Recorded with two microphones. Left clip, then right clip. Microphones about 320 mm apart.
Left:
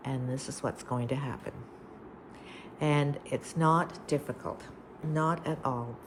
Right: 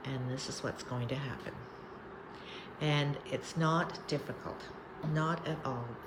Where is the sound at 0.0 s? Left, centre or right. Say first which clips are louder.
Left 3 dB; centre.